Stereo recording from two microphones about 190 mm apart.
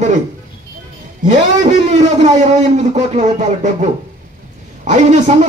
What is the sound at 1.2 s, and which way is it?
A man's voice, 40° right (ahead or behind).